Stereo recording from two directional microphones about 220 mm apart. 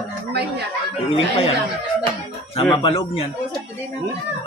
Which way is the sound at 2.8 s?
25° left (ahead or behind).